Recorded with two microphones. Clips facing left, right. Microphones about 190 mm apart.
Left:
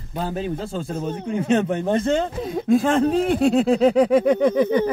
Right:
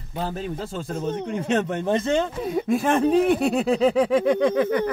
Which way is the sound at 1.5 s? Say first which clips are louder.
Left 4 dB; 20° left (ahead or behind).